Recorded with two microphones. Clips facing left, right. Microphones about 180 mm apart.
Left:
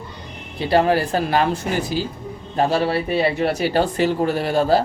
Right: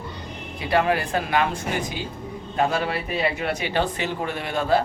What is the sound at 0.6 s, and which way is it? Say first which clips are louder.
Speech: left 5 dB; 30° left (ahead or behind).